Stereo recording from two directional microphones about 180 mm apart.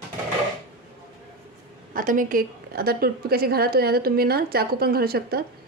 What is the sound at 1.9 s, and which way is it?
A woman's voice, 50° right (ahead or behind).